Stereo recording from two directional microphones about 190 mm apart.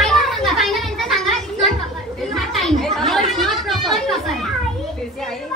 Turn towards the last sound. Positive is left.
turn(degrees=0)  # may be behind; listen again after turning